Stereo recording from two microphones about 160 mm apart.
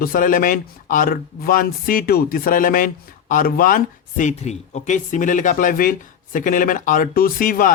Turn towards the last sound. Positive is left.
turn(degrees=60)  # may be behind; listen again after turning